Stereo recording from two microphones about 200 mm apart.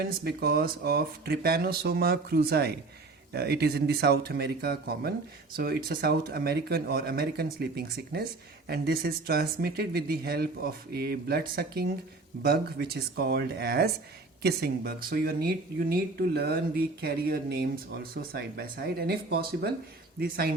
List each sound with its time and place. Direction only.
0.0 s speech: 50° right (ahead or behind)